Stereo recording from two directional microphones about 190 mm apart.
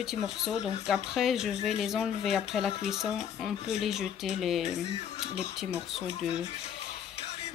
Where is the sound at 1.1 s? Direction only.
Centre (ahead or behind).